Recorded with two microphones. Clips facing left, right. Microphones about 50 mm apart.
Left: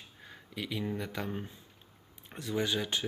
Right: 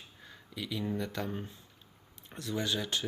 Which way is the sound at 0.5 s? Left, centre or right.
Left.